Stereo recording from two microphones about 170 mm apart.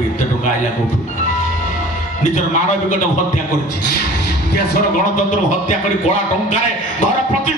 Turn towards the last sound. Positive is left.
turn(degrees=45)  # may be behind; listen again after turning